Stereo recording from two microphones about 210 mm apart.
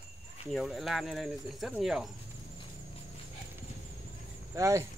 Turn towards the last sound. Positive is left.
turn(degrees=-15)  # may be behind; listen again after turning